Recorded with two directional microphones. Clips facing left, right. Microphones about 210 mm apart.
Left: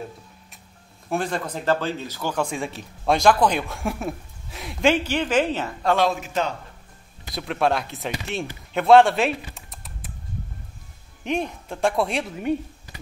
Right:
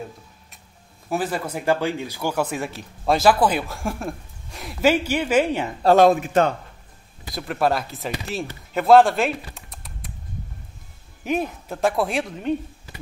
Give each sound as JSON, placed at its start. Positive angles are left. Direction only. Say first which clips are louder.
{"t": 1.0, "sound": "speech", "louder": "right 1 dB", "side_deg": -5}
{"t": 5.8, "sound": "a man's voice", "louder": "right 7 dB", "side_deg": -35}
{"t": 6.0, "sound": "a man's voice", "louder": "right 7 dB", "side_deg": -55}
{"t": 7.2, "sound": "speech", "louder": "right 1 dB", "side_deg": 0}
{"t": 11.2, "sound": "speech", "louder": "right 2 dB", "side_deg": -5}